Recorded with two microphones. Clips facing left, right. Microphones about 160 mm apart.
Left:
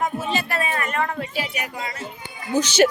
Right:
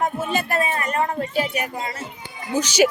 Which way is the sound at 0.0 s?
50° right (ahead or behind).